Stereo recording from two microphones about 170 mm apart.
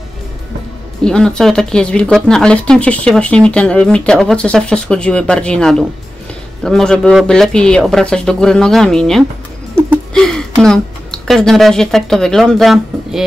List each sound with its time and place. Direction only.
1.0 s speech: 5° left (ahead or behind)